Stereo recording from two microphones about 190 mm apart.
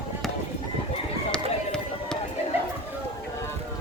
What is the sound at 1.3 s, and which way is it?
Run, 5° left (ahead or behind).